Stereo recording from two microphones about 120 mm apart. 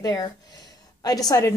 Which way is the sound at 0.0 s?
35° left (ahead or behind).